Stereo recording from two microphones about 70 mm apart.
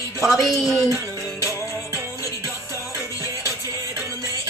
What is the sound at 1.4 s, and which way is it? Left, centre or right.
Music, left.